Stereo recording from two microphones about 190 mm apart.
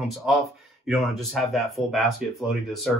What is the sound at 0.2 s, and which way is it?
Speech, centre (ahead or behind).